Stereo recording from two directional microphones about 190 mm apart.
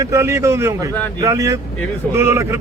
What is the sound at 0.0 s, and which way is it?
A man's voice, 15° right (ahead or behind).